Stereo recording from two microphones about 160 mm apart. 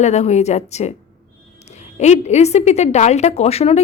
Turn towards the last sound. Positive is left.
turn(degrees=40)  # may be behind; listen again after turning